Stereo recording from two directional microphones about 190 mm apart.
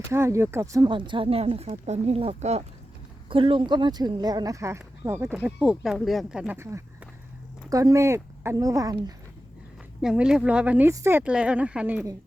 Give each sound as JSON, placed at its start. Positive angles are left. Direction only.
{"t": 0.1, "sound": "speech", "side_deg": -15}
{"t": 10.0, "sound": "speech", "side_deg": -5}